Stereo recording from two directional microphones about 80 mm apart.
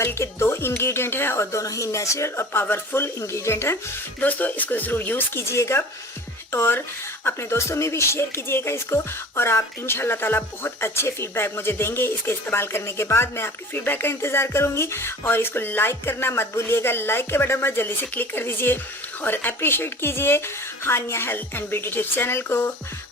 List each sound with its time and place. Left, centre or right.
0.0 s speech: left
4.2 s music: left